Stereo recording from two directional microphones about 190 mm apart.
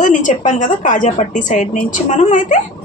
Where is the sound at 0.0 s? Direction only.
40° left (ahead or behind).